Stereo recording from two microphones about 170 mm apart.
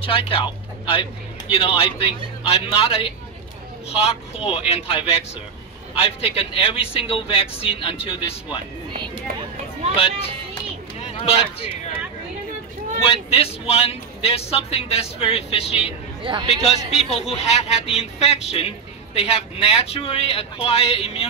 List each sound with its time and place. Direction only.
0.0 s a man's voice: 30° left (ahead or behind)
11.1 s speech: 35° left (ahead or behind)
13.0 s a man's voice: 35° left (ahead or behind)
16.2 s speech: 25° right (ahead or behind)
16.4 s a man's voice: 40° left (ahead or behind)